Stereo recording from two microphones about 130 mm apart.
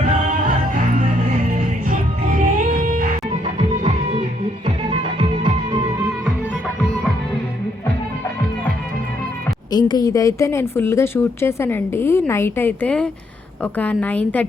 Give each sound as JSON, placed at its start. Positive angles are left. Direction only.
{"t": 1.5, "sound": "music", "side_deg": -85}
{"t": 4.1, "sound": "music", "side_deg": -45}
{"t": 9.7, "sound": "a woman's voice", "side_deg": 30}